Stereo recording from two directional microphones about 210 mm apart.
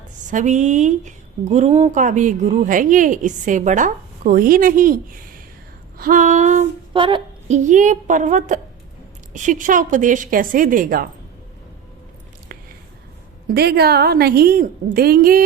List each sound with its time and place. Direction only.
0.3 s a woman's voice: 35° right (ahead or behind)
6.9 s a woman's voice: 25° right (ahead or behind); by 11.1 s 40° right (ahead or behind)
13.5 s a woman's voice: 50° right (ahead or behind)